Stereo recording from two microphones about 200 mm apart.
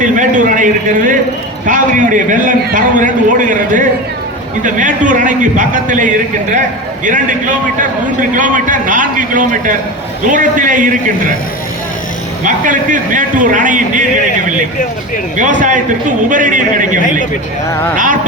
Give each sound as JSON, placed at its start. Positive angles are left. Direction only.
{"t": 0.0, "sound": "a man's voice", "side_deg": -40}
{"t": 12.5, "sound": "a man's voice", "side_deg": -40}
{"t": 15.4, "sound": "a man's voice", "side_deg": -40}